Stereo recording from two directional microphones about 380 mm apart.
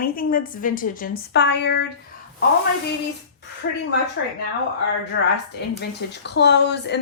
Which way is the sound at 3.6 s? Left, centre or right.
Left.